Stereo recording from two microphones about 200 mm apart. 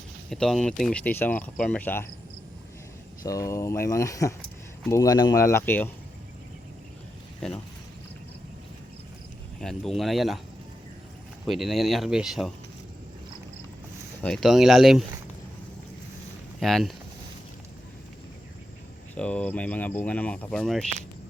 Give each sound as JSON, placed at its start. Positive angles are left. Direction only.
{"t": 0.3, "sound": "speech", "side_deg": 0}
{"t": 3.2, "sound": "speech", "side_deg": 15}
{"t": 9.6, "sound": "speech", "side_deg": 0}
{"t": 11.4, "sound": "speech", "side_deg": 0}
{"t": 14.2, "sound": "speech", "side_deg": 5}
{"t": 16.6, "sound": "speech", "side_deg": 0}
{"t": 19.1, "sound": "speech", "side_deg": 5}